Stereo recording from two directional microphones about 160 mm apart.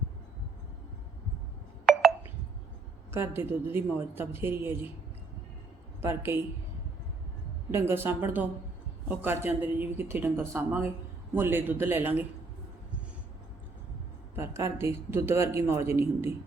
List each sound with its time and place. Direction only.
1.9 s telephone dialing: 5° right (ahead or behind)
3.1 s a man's voice: 15° right (ahead or behind)
6.0 s a man's voice: 15° right (ahead or behind)
7.7 s a man's voice: 15° right (ahead or behind)
14.3 s a man's voice: 15° right (ahead or behind)